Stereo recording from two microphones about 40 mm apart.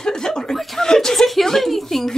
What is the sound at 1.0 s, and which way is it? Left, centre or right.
A woman's voice, centre.